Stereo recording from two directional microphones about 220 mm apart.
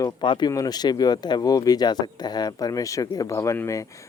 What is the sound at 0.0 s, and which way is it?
Speech, 20° left (ahead or behind).